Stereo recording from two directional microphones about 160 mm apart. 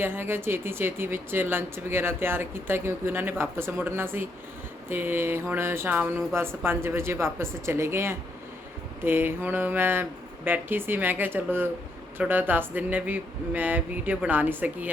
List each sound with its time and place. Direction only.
0.0 s speech: 15° right (ahead or behind)